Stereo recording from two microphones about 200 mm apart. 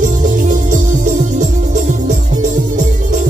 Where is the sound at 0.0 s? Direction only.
40° right (ahead or behind).